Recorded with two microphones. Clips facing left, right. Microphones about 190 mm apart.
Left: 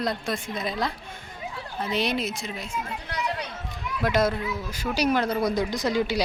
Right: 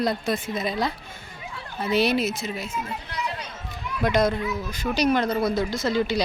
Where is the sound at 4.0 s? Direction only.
5° left (ahead or behind).